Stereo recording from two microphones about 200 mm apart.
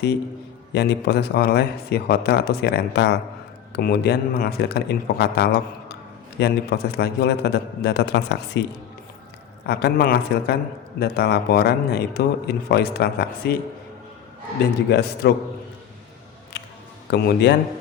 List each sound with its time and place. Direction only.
0.7 s a man's voice: 55° left (ahead or behind)
9.6 s a man's voice: 55° left (ahead or behind)
14.8 s a man's voice: 55° left (ahead or behind)
16.5 s music: 55° left (ahead or behind)
17.1 s a man's voice: 55° left (ahead or behind)